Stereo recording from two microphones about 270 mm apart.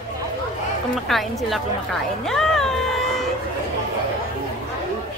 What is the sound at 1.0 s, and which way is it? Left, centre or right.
Speech, centre.